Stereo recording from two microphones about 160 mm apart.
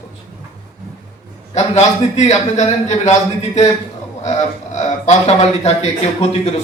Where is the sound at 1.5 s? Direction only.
45° left (ahead or behind).